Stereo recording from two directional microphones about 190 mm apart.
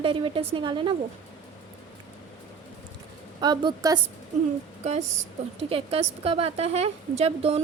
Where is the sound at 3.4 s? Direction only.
25° right (ahead or behind).